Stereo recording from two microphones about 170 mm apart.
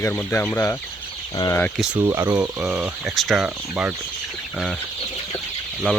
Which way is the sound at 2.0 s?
20° right (ahead or behind).